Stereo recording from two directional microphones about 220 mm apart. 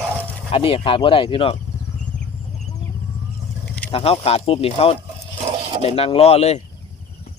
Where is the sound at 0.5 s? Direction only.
25° left (ahead or behind).